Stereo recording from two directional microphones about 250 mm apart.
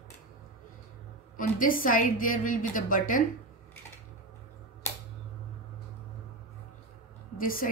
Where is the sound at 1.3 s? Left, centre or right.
Left.